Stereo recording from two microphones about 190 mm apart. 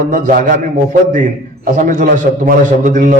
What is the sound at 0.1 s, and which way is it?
Speech, 45° right (ahead or behind).